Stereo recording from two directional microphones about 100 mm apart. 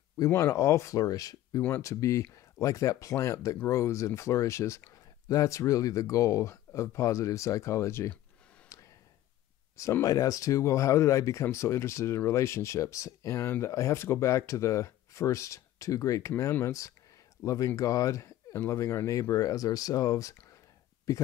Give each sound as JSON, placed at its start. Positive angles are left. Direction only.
{"t": 0.2, "sound": "speech", "side_deg": 25}
{"t": 8.7, "sound": "a sound", "side_deg": 30}
{"t": 9.8, "sound": "speech", "side_deg": 30}